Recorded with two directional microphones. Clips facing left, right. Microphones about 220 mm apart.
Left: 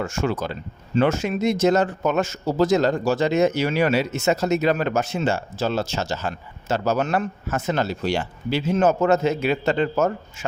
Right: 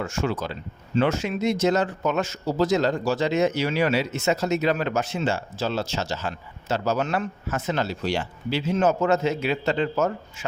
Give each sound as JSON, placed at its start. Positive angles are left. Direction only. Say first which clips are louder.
{"t": 0.0, "sound": "speech", "louder": "left 2 dB", "side_deg": 50}